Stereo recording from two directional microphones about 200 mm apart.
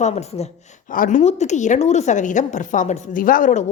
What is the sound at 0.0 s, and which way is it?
Speech, 35° left (ahead or behind).